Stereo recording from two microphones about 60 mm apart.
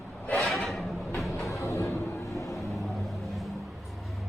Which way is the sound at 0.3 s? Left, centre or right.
Centre.